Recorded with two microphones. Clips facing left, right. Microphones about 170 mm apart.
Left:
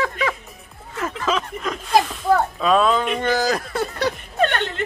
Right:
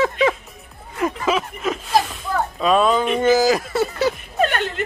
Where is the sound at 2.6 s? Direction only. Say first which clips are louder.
Right 1 dB; centre (ahead or behind).